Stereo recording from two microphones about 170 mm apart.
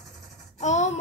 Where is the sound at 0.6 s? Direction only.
40° left (ahead or behind).